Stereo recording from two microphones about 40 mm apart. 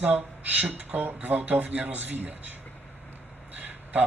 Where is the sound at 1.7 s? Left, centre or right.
Right.